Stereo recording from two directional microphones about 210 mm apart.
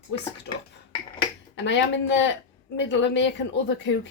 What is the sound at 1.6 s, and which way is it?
A woman's voice, 55° left (ahead or behind).